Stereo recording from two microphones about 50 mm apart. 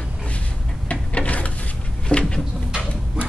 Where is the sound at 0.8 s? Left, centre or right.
Left.